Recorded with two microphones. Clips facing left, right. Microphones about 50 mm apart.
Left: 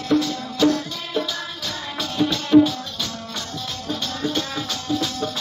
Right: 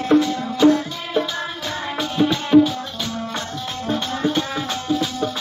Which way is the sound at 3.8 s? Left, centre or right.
Right.